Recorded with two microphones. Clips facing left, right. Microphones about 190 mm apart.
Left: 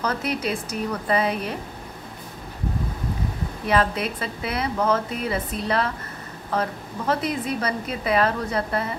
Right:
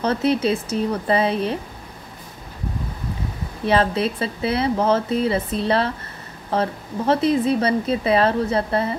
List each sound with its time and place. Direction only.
0.0 s a woman's voice: 30° right (ahead or behind)
3.6 s a woman's voice: 30° right (ahead or behind)